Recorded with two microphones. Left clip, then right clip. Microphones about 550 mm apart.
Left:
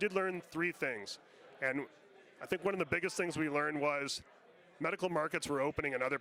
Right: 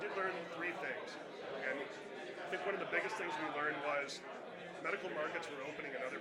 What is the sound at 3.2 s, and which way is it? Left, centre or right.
A man's voice, left.